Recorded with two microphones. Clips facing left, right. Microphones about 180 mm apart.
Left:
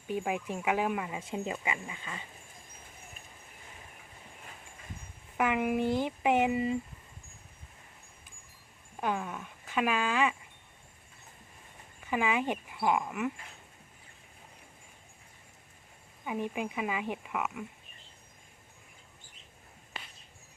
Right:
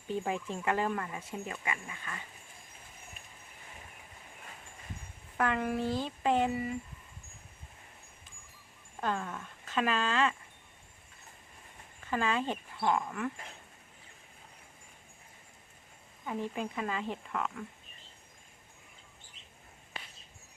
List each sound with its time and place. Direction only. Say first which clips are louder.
0.1 s speech: left 1 dB; 10° left (ahead or behind)
5.4 s speech: left 2 dB; 15° left (ahead or behind)
9.0 s speech: left 1 dB; 10° left (ahead or behind)
12.0 s speech: left 2 dB; 15° left (ahead or behind)
16.2 s speech: left 2 dB; 10° left (ahead or behind)